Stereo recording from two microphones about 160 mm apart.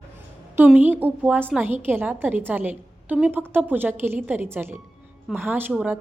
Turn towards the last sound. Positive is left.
turn(degrees=-10)  # may be behind; listen again after turning